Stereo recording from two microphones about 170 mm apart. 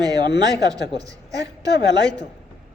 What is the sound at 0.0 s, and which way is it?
A man's voice, 25° right (ahead or behind).